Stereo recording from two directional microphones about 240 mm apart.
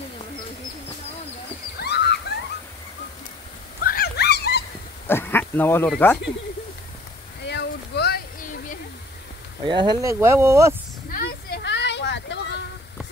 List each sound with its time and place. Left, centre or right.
1.8 s a sound: left
3.8 s dog: left
5.0 s speech: centre
7.4 s a sound: left
9.7 s speech: centre
11.1 s vehicle: left